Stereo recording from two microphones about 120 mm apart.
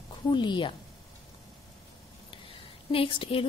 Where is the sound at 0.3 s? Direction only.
40° left (ahead or behind).